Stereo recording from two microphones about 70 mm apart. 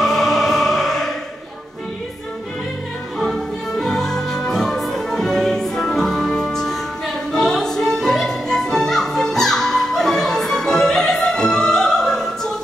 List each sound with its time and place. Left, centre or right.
0.0 s music: centre
3.2 s music: centre